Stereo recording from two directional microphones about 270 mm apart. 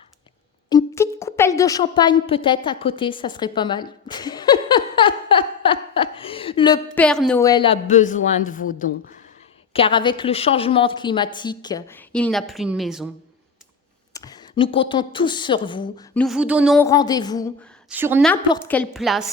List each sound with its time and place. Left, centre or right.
0.7 s a sound: centre
2.2 s a woman's voice: centre
6.9 s a woman's voice: centre; by 9.1 s left
9.7 s a woman's voice: centre
14.1 s a woman's voice: centre
16.1 s a woman's voice: centre
16.8 s a woman's voice: centre
17.8 s a woman's voice: centre
18.4 s a woman's voice: centre